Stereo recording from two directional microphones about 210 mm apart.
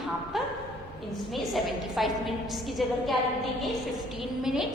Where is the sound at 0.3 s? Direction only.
Centre (ahead or behind).